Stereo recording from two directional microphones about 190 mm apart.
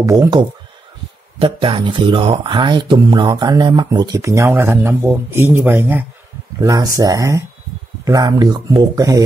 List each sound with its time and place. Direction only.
0.0 s speech: 15° right (ahead or behind)